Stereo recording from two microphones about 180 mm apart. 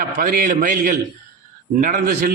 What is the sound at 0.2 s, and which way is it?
A man's voice, 50° right (ahead or behind).